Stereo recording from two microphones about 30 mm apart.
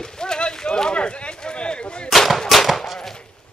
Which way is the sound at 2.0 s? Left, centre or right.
Centre.